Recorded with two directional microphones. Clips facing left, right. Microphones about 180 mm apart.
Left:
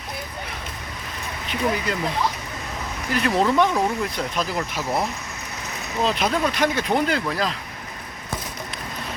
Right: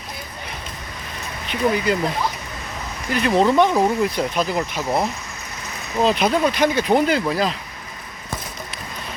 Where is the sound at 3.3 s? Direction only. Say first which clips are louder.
Right 4 dB; 30° right (ahead or behind).